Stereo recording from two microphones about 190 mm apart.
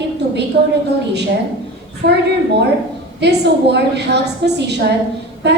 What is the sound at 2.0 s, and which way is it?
Speech, 60° right (ahead or behind).